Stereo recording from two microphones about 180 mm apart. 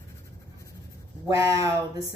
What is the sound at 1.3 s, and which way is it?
Speech, 15° right (ahead or behind).